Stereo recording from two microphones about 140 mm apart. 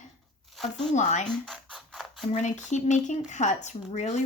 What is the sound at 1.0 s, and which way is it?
Speech, 60° left (ahead or behind).